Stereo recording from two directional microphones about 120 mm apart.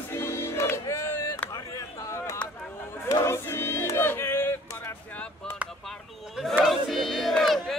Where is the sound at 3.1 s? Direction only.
20° left (ahead or behind).